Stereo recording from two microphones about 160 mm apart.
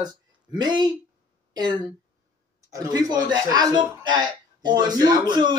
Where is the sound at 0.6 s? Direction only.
25° right (ahead or behind).